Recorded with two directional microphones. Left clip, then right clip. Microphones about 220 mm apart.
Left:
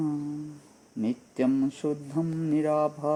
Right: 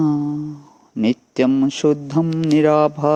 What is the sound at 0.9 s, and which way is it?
Mantra, 25° right (ahead or behind).